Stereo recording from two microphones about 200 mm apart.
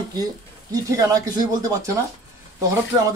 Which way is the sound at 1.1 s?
15° right (ahead or behind).